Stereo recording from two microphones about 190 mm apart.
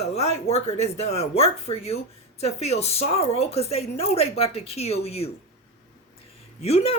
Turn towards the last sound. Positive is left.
turn(degrees=35)  # may be behind; listen again after turning